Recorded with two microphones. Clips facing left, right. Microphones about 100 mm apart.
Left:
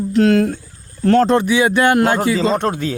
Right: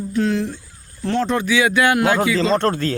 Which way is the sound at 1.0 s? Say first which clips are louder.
Left 7 dB; 45° left (ahead or behind).